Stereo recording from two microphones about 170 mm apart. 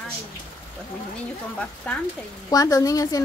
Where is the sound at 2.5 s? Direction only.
20° left (ahead or behind).